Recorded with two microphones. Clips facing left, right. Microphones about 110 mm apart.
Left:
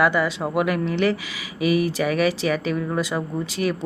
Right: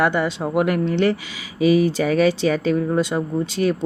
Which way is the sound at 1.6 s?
30° right (ahead or behind).